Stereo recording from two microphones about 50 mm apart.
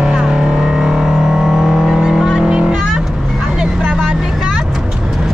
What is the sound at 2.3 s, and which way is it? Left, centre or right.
Music, centre.